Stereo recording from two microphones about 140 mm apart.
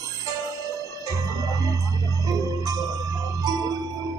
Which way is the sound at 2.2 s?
25° right (ahead or behind).